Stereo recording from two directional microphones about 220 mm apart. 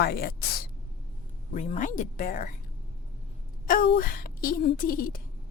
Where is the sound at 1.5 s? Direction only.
35° left (ahead or behind).